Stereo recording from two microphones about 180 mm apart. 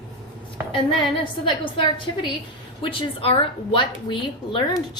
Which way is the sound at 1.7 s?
25° left (ahead or behind).